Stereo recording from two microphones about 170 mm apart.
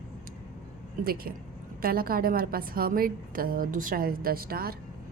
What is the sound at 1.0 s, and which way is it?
A woman's voice, 60° right (ahead or behind).